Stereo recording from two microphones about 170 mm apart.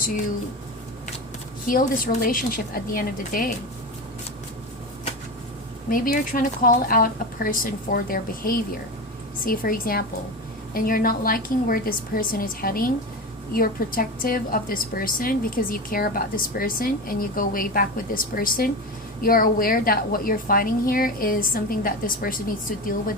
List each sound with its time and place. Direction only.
1.6 s a woman's voice: 55° left (ahead or behind)
5.9 s a woman's voice: 55° left (ahead or behind)